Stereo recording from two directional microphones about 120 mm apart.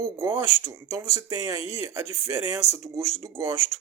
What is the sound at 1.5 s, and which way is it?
Speech, 50° left (ahead or behind).